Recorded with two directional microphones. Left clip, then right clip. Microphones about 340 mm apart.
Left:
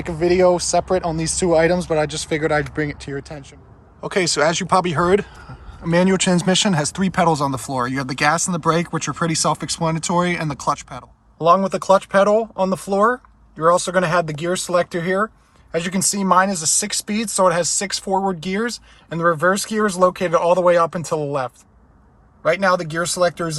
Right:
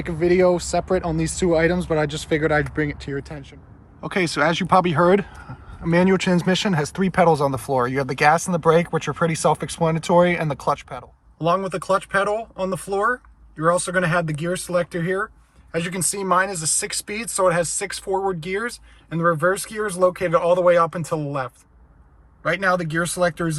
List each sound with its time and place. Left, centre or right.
0.0 s speech: centre